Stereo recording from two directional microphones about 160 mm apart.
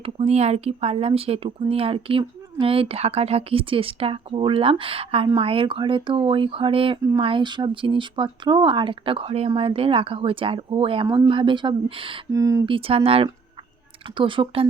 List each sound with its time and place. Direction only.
0.0 s speech: 40° right (ahead or behind)
12.3 s speech: 20° right (ahead or behind)
12.6 s speech: 35° right (ahead or behind)